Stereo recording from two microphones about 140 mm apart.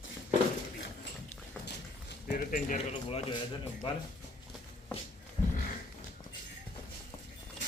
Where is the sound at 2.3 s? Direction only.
70° left (ahead or behind).